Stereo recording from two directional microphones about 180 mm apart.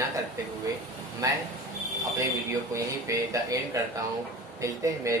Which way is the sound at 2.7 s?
20° right (ahead or behind).